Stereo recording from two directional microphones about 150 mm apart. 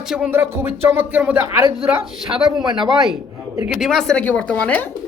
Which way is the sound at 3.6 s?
5° right (ahead or behind).